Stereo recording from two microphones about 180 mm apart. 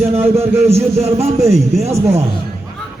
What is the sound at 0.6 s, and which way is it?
A man's voice, 35° right (ahead or behind).